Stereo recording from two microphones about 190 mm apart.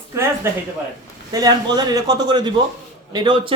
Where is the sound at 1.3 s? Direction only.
20° right (ahead or behind).